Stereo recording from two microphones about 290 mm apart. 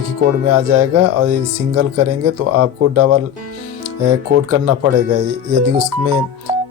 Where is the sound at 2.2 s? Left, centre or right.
Right.